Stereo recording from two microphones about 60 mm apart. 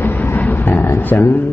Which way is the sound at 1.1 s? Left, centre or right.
Left.